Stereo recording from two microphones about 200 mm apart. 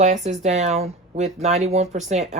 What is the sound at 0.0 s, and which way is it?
Speech, 35° right (ahead or behind).